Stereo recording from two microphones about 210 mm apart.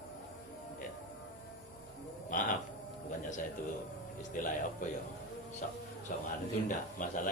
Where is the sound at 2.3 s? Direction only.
40° left (ahead or behind).